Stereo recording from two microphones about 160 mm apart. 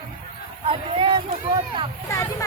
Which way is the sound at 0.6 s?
30° right (ahead or behind).